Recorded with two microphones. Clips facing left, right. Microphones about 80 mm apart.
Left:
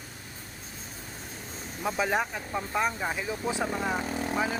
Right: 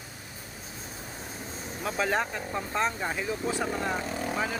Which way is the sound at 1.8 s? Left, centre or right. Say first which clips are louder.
Left 1 dB; centre.